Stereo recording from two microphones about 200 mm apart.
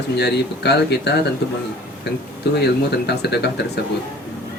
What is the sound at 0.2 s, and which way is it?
Speech, 55° left (ahead or behind).